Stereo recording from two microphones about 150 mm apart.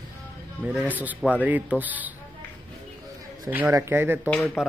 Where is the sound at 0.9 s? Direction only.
10° right (ahead or behind).